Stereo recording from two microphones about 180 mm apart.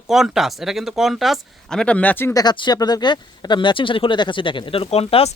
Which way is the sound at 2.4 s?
25° left (ahead or behind).